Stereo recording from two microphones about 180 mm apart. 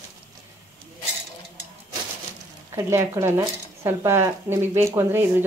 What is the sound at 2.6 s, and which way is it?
Speech, 15° right (ahead or behind).